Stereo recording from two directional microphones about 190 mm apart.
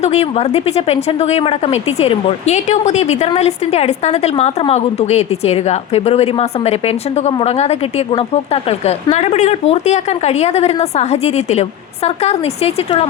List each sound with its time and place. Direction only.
0.0 s a woman's voice: 35° left (ahead or behind)